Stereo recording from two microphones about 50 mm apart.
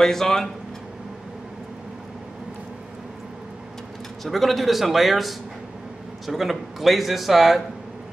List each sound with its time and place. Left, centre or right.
0.0 s speech: centre
4.2 s a man's voice: centre